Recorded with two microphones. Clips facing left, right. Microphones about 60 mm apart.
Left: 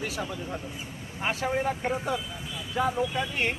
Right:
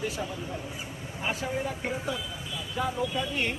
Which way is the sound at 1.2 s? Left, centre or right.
Left.